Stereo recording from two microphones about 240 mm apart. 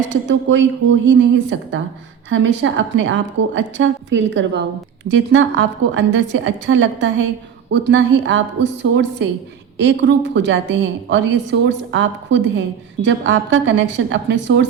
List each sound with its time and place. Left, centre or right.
0.1 s a woman's voice: right